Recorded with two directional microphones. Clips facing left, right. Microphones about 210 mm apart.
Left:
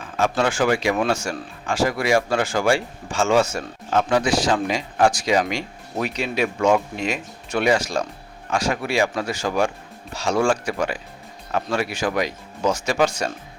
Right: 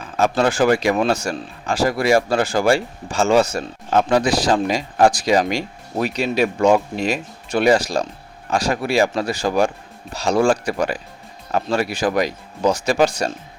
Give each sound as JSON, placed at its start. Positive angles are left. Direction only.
{"t": 0.2, "sound": "speech", "side_deg": -35}